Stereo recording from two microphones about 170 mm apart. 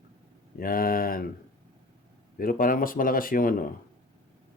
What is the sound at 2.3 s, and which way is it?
Speech, 55° left (ahead or behind).